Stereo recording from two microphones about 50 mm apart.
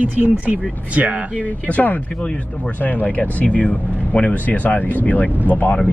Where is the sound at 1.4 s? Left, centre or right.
Left.